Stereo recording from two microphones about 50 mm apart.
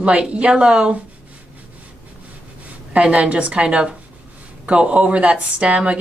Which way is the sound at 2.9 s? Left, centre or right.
Centre.